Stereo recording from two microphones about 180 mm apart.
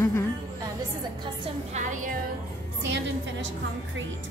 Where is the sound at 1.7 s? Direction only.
45° right (ahead or behind).